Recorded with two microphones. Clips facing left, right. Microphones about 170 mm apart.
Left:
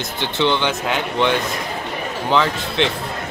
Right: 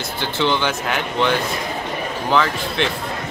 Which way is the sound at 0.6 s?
20° left (ahead or behind).